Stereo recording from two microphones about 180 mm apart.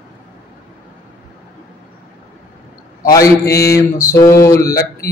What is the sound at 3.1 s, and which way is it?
Mantra, 15° left (ahead or behind).